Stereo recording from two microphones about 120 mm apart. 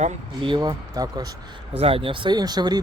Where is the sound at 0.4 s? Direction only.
40° right (ahead or behind).